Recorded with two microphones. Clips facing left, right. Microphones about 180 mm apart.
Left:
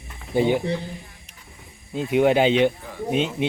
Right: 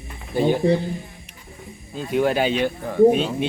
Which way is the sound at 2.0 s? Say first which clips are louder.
Left 2 dB; 20° left (ahead or behind).